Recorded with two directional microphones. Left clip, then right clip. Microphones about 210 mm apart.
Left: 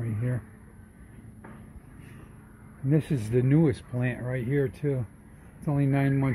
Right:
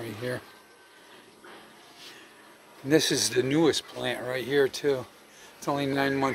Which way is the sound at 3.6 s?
15° right (ahead or behind).